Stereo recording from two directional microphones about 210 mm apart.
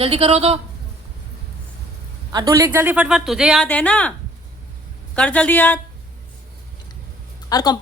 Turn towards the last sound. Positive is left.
turn(degrees=20)  # may be behind; listen again after turning